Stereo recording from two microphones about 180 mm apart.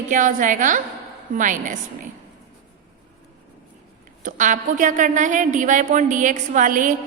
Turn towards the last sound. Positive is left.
turn(degrees=-45)  # may be behind; listen again after turning